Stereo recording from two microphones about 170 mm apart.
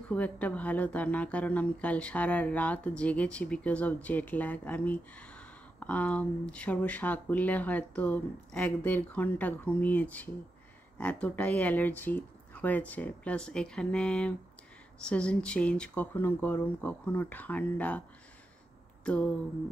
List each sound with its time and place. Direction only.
0.1 s speech: 10° left (ahead or behind)